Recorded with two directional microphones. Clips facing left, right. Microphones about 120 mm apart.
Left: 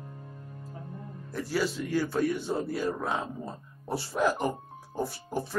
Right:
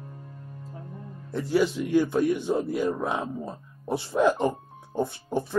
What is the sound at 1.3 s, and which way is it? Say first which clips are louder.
Speech: right 6 dB; 20° right (ahead or behind).